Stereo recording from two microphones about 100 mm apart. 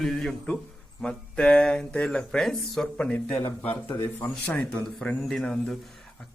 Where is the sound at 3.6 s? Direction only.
85° left.